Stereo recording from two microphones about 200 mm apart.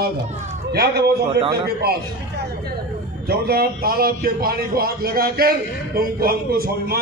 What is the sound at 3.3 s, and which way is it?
A man's voice, 50° right (ahead or behind).